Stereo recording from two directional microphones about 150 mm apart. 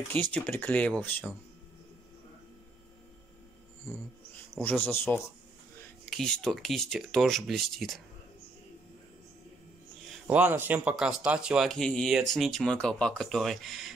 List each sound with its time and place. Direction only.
0.1 s speech: 10° left (ahead or behind)
4.6 s speech: 10° left (ahead or behind)
6.0 s speech: 5° left (ahead or behind)
10.2 s speech: 10° right (ahead or behind)